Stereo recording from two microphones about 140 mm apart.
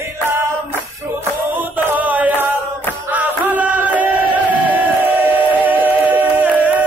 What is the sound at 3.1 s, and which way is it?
Music, 10° right (ahead or behind).